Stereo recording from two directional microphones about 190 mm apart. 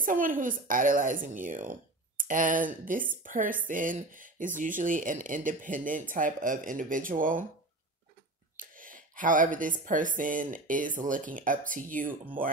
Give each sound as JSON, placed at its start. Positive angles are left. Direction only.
{"t": 0.0, "sound": "a woman's voice", "side_deg": -45}
{"t": 8.5, "sound": "speech", "side_deg": -45}